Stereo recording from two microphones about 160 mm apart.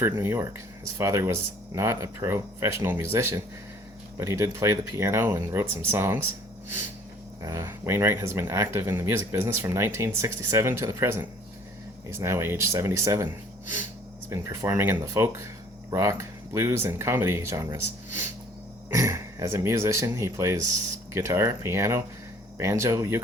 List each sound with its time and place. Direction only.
0.0 s speech: 15° right (ahead or behind)
7.4 s speech: 15° right (ahead or behind)
14.3 s speech: 20° right (ahead or behind)
18.9 s speech: 20° right (ahead or behind)